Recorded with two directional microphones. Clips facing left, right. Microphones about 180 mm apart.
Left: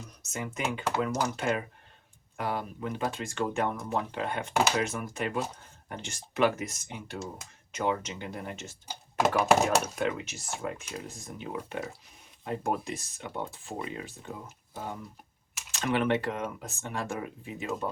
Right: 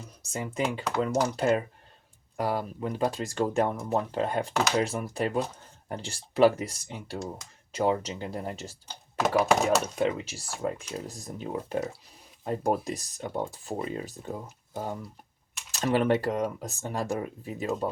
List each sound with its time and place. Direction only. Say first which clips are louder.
0.2 s speech: right 4 dB; 30° right (ahead or behind)
8.9 s speech: right 1 dB; 10° left (ahead or behind)
10.0 s speech: right 3 dB; 35° right (ahead or behind)